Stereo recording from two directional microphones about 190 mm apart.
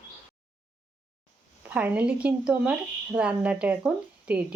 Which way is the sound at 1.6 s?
5° right (ahead or behind).